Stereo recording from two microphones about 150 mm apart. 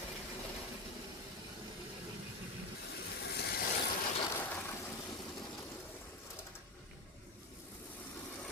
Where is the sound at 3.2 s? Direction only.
90° left.